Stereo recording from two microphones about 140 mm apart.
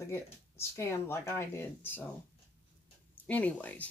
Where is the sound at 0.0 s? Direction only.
20° left (ahead or behind).